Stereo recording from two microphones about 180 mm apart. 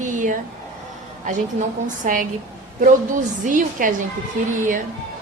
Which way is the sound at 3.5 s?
45° right (ahead or behind).